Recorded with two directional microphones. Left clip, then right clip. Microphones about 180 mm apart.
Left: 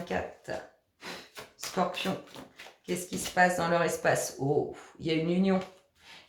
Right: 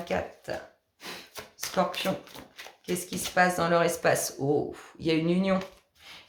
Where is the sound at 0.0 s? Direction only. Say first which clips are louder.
Right 3 dB; 40° right (ahead or behind).